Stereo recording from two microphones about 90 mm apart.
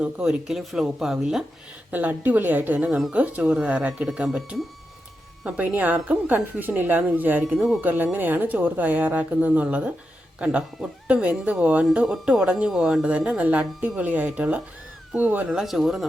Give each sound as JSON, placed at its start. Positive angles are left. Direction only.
{"t": 0.0, "sound": "speech", "side_deg": -10}
{"t": 1.9, "sound": "speech", "side_deg": -20}
{"t": 7.4, "sound": "speech", "side_deg": -5}
{"t": 7.8, "sound": "speech", "side_deg": -20}
{"t": 11.1, "sound": "speech", "side_deg": -15}
{"t": 15.4, "sound": "speech", "side_deg": -5}